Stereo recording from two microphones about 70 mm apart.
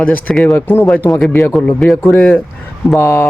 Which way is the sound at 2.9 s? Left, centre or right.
Left.